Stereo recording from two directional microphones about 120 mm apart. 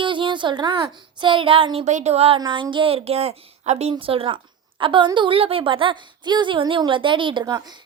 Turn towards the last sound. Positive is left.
turn(degrees=-35)  # may be behind; listen again after turning